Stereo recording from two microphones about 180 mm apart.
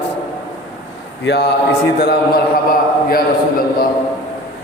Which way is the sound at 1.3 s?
65° left (ahead or behind).